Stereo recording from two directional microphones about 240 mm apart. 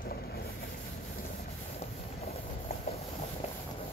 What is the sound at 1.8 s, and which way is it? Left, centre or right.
Train, left.